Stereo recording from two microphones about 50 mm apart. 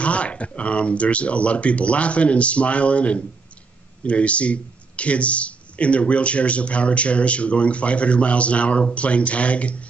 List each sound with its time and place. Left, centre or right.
0.0 s speech: left